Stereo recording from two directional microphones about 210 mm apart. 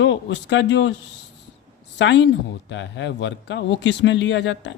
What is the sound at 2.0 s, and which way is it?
Speech, 55° left (ahead or behind).